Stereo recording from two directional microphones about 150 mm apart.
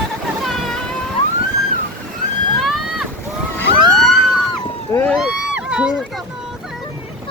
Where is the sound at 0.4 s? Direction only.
Centre (ahead or behind).